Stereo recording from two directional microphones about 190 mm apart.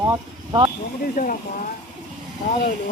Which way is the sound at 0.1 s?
20° right (ahead or behind).